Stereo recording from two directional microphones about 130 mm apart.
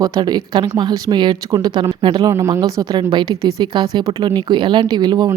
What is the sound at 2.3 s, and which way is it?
Speech, 20° right (ahead or behind).